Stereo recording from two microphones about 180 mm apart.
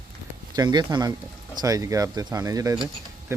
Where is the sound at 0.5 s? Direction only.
25° right (ahead or behind).